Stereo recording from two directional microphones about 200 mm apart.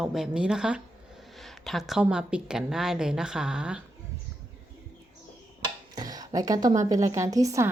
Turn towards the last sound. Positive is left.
turn(degrees=-15)  # may be behind; listen again after turning